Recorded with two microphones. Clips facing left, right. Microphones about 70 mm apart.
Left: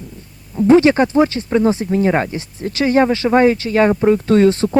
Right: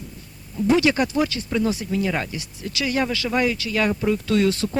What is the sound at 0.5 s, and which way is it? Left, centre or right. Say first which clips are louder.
Speech: left 8 dB; left.